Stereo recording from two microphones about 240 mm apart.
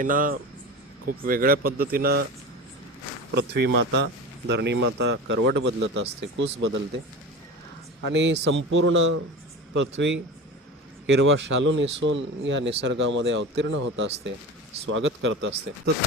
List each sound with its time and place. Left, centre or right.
0.0 s speech: right
3.3 s speech: right
8.1 s speech: right
11.0 s speech: right